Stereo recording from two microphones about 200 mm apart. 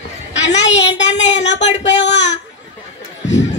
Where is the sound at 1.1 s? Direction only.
35° left (ahead or behind).